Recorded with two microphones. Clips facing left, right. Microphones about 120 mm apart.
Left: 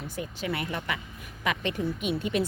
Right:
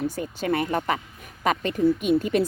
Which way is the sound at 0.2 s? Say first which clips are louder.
Right 7 dB; 45° right (ahead or behind).